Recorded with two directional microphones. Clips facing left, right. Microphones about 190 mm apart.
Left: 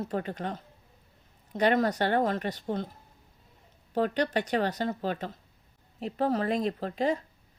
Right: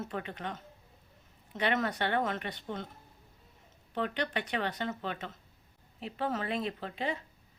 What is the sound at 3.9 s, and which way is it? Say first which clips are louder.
Speech: left 7 dB; 40° left (ahead or behind).